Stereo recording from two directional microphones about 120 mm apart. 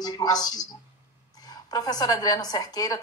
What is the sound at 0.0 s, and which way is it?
A woman's voice, 35° left (ahead or behind).